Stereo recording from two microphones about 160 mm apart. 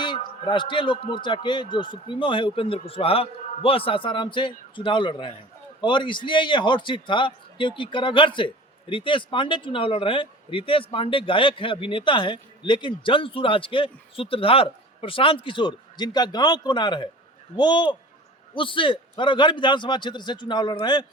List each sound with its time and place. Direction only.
0.0 s a man's voice: 30° left (ahead or behind)